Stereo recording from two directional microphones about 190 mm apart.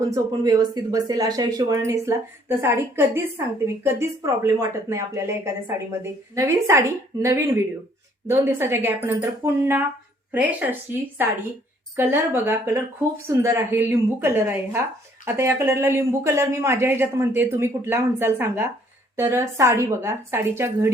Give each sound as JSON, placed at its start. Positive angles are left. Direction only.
{"t": 0.1, "sound": "speech", "side_deg": -20}
{"t": 4.4, "sound": "speech", "side_deg": -15}